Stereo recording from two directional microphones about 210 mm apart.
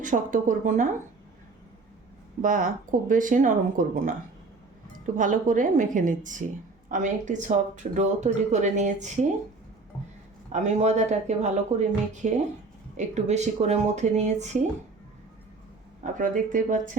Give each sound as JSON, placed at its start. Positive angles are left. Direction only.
{"t": 0.0, "sound": "speech", "side_deg": -40}
{"t": 2.4, "sound": "speech", "side_deg": -40}
{"t": 5.1, "sound": "speech", "side_deg": -40}
{"t": 10.5, "sound": "speech", "side_deg": -35}
{"t": 16.1, "sound": "speech", "side_deg": -40}